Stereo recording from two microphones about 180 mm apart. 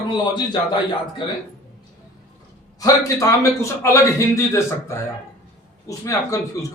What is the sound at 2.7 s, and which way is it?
A man's voice, 20° left (ahead or behind).